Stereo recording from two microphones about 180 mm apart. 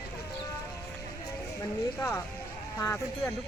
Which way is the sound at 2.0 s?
15° left (ahead or behind).